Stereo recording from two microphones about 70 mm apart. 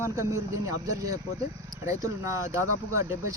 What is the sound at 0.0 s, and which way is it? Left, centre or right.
Speech, right.